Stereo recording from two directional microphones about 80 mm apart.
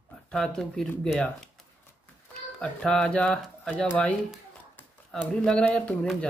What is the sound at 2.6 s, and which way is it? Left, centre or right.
Speech, centre.